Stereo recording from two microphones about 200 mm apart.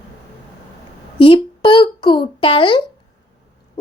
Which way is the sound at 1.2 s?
25° left (ahead or behind).